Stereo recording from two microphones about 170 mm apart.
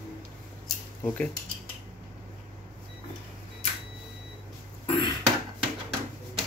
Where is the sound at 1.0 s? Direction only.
5° left (ahead or behind).